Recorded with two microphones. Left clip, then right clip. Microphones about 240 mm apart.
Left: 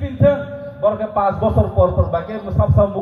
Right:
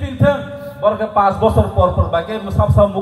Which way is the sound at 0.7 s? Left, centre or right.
Right.